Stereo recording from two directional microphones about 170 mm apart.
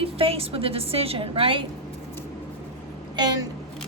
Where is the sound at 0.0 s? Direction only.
35° right (ahead or behind).